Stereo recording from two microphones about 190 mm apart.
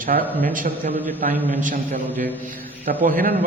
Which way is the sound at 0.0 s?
45° right (ahead or behind).